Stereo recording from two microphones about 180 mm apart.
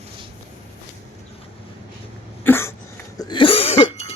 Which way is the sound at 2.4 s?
15° left (ahead or behind).